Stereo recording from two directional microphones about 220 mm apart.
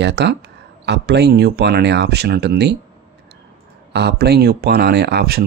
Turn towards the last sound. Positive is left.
turn(degrees=-45)  # may be behind; listen again after turning